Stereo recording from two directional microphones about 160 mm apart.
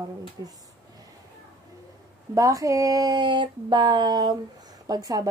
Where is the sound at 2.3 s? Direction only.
20° right (ahead or behind).